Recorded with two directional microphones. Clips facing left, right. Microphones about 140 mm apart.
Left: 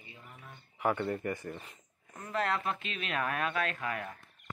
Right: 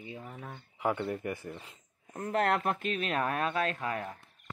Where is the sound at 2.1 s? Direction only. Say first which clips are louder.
Right 4 dB; 55° right (ahead or behind); by 4.1 s 30° right (ahead or behind).